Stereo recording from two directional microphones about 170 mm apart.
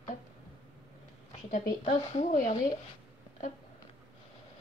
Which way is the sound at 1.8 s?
40° left (ahead or behind).